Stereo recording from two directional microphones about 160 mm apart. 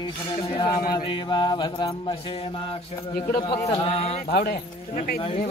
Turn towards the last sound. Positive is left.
turn(degrees=70)  # may be behind; listen again after turning